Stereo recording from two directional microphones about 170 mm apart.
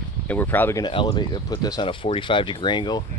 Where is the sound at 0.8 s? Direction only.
25° left (ahead or behind).